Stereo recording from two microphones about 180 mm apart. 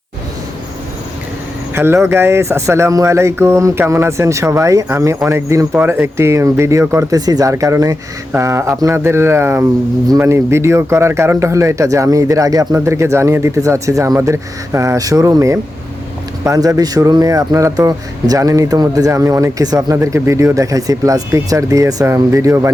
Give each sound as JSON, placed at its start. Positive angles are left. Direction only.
{"t": 1.7, "sound": "speech", "side_deg": -15}